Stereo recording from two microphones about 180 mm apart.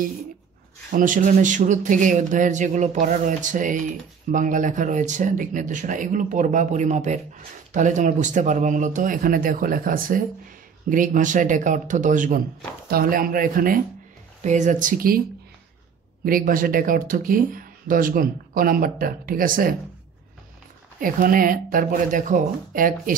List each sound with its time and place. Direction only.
0.9 s speech: 45° right (ahead or behind)
16.3 s speech: 50° right (ahead or behind)
21.0 s speech: 50° right (ahead or behind)